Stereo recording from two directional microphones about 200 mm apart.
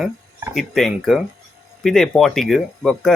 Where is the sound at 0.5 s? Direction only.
Centre (ahead or behind).